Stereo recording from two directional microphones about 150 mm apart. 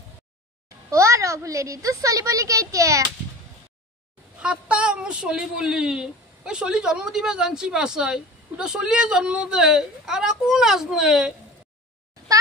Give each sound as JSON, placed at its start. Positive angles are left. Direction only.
{"t": 0.8, "sound": "a woman's voice", "side_deg": -20}
{"t": 4.4, "sound": "a woman's voice", "side_deg": -5}